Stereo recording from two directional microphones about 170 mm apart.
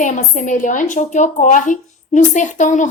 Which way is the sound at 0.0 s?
45° left (ahead or behind).